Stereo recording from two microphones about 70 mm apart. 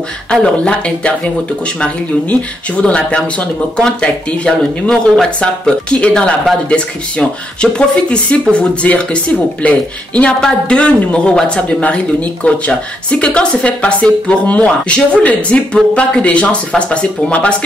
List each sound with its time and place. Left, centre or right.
0.3 s speech: centre